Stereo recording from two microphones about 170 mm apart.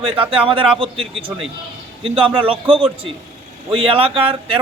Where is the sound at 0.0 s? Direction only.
30° right (ahead or behind).